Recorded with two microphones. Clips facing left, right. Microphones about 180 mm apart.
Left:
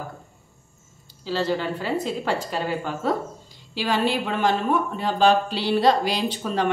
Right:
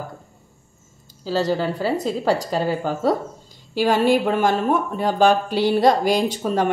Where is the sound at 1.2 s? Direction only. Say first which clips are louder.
Right 3 dB; 40° right (ahead or behind).